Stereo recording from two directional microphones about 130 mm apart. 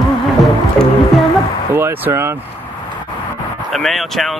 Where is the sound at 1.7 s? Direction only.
15° right (ahead or behind).